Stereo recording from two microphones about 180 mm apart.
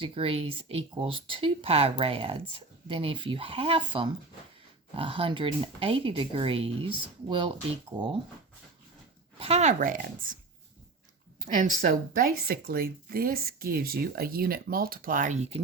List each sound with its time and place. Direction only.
0.0 s speech: 30° right (ahead or behind)
9.4 s speech: 35° right (ahead or behind)
11.4 s speech: 45° right (ahead or behind)